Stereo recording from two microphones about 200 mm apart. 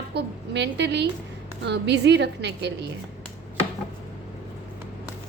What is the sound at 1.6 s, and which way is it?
A woman's voice, 60° right (ahead or behind).